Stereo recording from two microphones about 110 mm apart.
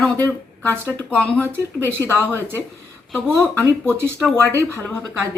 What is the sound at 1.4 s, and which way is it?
Speech, 20° right (ahead or behind).